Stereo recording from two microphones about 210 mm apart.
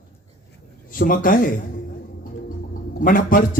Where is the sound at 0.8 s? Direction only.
45° left (ahead or behind).